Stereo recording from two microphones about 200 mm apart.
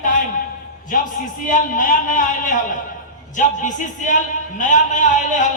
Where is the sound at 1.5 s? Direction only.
40° left (ahead or behind).